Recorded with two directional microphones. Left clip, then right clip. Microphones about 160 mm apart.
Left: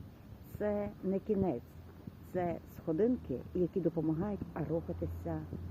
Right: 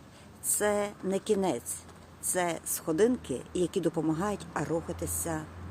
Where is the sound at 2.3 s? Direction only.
20° right (ahead or behind).